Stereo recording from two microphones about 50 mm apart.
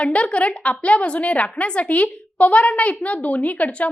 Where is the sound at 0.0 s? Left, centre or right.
Left.